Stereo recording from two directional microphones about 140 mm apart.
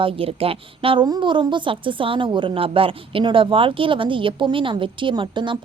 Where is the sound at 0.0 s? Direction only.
40° right (ahead or behind).